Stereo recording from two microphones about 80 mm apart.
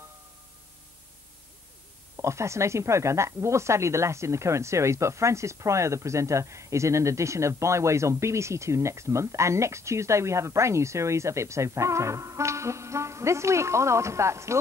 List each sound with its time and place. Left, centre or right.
2.1 s speech: right